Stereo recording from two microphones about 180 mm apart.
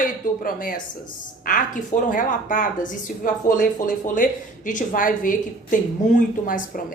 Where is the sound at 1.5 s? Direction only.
50° left (ahead or behind).